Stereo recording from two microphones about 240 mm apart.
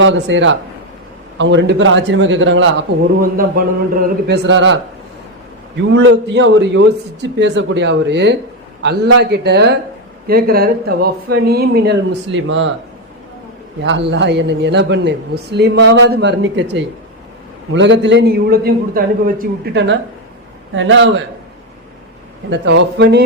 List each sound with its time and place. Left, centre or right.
0.0 s a man's voice: right
3.2 s a man's voice: right
5.9 s a man's voice: right
13.8 s a man's voice: right
22.4 s a man's voice: right